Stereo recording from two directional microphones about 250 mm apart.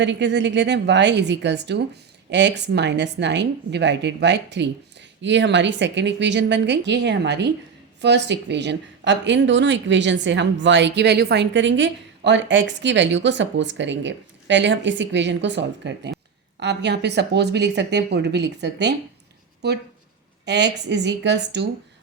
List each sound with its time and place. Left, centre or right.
0.0 s speech: right